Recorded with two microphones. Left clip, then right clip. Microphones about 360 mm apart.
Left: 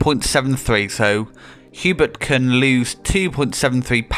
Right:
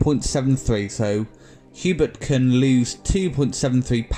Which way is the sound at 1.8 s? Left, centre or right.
Left.